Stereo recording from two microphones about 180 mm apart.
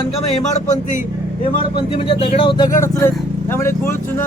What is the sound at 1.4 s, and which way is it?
A man's voice, 30° left (ahead or behind).